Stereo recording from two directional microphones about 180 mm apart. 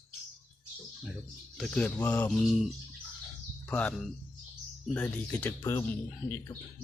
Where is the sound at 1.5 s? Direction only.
5° left (ahead or behind).